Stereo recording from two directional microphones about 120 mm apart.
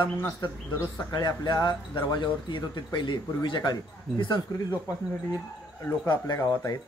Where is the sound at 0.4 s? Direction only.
40° left (ahead or behind).